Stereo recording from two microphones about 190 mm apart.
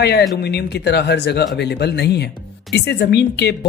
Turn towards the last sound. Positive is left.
turn(degrees=60)  # may be behind; listen again after turning